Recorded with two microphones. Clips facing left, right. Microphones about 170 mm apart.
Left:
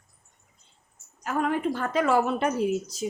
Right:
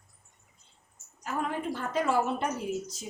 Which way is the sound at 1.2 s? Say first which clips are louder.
Left 6 dB; 85° left.